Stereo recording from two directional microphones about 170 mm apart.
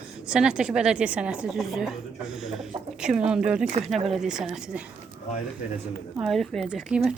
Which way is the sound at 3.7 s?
40° right (ahead or behind).